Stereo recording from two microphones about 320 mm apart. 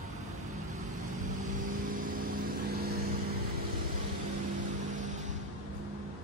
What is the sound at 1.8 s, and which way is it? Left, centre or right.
Vehicle, right.